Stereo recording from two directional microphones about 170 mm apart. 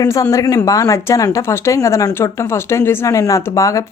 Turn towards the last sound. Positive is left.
turn(degrees=20)  # may be behind; listen again after turning